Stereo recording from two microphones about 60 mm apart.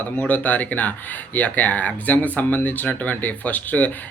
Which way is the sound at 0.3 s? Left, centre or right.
Left.